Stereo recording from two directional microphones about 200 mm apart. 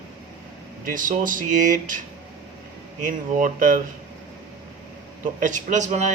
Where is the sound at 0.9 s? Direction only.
40° right (ahead or behind).